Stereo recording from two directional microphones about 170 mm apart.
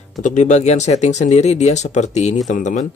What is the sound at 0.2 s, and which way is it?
Speech, 45° left (ahead or behind).